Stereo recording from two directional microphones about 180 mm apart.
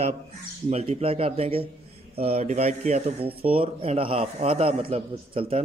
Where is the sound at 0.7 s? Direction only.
35° right (ahead or behind).